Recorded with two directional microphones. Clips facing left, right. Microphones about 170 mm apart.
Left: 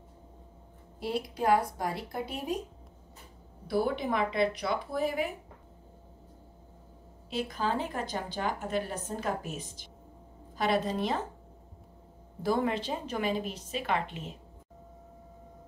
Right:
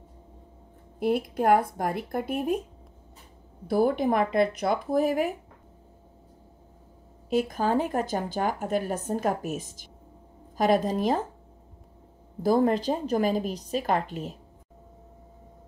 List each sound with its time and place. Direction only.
0.9 s speech: 50° right (ahead or behind)
3.6 s speech: 50° right (ahead or behind)
7.2 s speech: 45° right (ahead or behind)
12.4 s a woman's voice: 40° right (ahead or behind)